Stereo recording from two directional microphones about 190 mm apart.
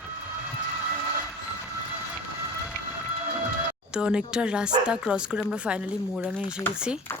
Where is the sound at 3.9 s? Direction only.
5° right (ahead or behind).